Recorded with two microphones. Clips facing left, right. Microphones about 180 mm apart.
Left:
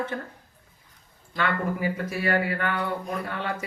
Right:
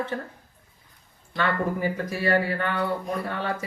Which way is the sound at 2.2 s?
35° right (ahead or behind).